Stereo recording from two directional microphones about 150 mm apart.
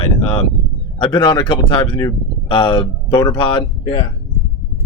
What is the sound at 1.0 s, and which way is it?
Speech, 30° left (ahead or behind).